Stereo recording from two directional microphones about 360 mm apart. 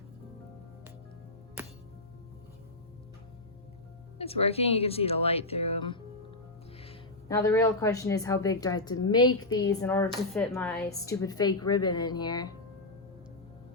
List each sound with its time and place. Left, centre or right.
1.6 s music: centre
4.2 s a woman's voice: centre